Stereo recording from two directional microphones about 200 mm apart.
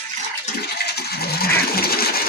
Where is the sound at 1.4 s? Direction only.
50° left (ahead or behind).